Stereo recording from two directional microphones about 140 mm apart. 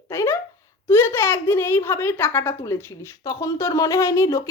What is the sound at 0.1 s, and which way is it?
A woman's voice, 15° left (ahead or behind).